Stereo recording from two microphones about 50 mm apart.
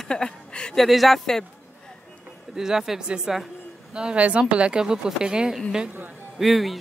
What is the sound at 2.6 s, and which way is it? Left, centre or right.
Speech, centre.